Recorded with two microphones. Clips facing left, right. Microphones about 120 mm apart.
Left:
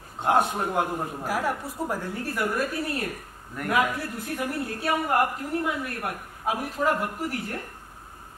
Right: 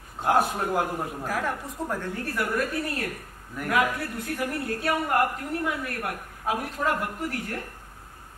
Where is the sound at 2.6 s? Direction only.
25° left (ahead or behind).